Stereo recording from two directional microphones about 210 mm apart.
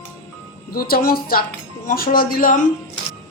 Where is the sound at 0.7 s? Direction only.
45° left (ahead or behind).